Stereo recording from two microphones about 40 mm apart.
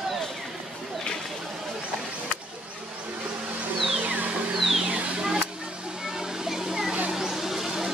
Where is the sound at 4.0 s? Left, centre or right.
Right.